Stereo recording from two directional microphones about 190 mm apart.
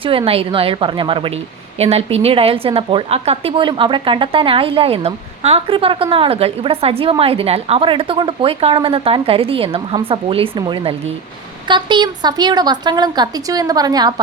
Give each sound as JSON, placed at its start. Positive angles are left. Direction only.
{"t": 0.0, "sound": "a woman's voice", "side_deg": -30}